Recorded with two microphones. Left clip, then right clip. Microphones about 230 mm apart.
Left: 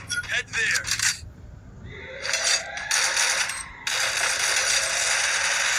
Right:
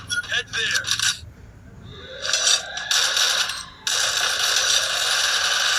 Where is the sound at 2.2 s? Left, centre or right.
Centre.